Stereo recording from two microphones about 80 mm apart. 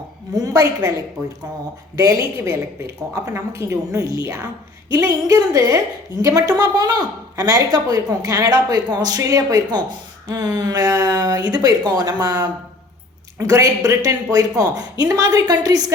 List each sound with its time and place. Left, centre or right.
0.3 s speech: right
2.4 s speech: right
13.4 s speech: right